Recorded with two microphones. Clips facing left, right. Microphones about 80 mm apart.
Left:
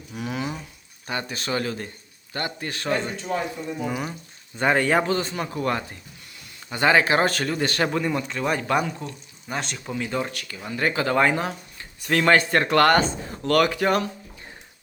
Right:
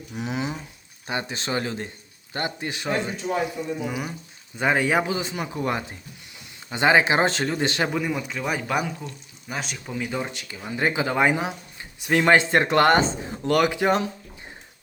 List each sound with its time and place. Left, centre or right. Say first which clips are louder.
0.2 s a sound: right 1 dB; right
1.0 s speech: right 1 dB; right
6.7 s speech: even; centre
7.9 s speech: left 2 dB; centre